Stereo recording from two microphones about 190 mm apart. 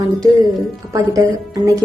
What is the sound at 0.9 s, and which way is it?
Speech, 20° right (ahead or behind).